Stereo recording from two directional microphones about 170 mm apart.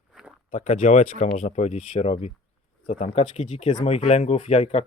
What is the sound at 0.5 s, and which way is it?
Speech, 45° left (ahead or behind).